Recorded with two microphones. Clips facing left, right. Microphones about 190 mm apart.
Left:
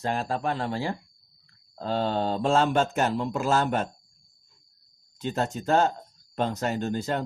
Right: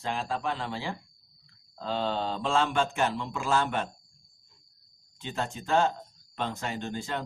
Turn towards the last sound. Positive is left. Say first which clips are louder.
# left 6 dB
turn(degrees=40)  # may be behind; listen again after turning